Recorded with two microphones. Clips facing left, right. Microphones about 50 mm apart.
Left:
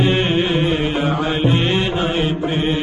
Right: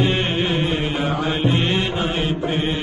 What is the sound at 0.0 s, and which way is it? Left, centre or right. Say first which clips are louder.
Music: left 3 dB; left.